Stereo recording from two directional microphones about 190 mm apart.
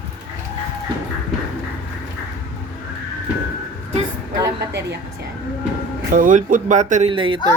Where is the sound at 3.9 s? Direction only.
20° right (ahead or behind).